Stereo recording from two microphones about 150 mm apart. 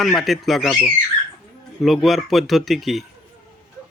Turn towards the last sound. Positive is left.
turn(degrees=0)  # may be behind; listen again after turning